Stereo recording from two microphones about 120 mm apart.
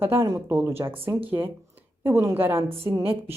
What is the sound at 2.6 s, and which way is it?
Speech, 50° right (ahead or behind).